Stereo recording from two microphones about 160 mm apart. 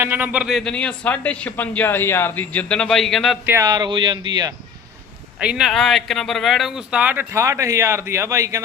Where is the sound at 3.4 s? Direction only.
20° right (ahead or behind).